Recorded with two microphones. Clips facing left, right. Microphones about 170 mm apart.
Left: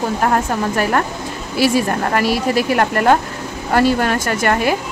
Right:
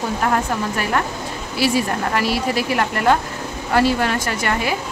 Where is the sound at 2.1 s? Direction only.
50° left (ahead or behind).